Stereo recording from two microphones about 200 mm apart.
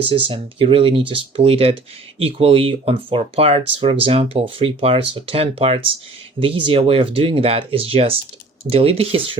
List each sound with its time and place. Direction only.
0.0 s speech: 25° right (ahead or behind)